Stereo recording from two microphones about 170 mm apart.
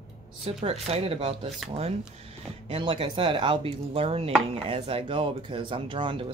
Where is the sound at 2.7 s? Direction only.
35° right (ahead or behind).